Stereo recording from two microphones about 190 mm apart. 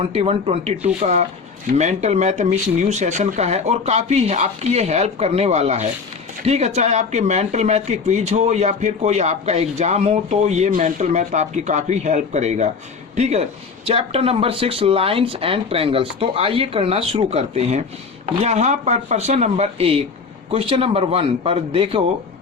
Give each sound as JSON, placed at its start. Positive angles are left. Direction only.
{"t": 0.0, "sound": "a man's voice", "side_deg": -30}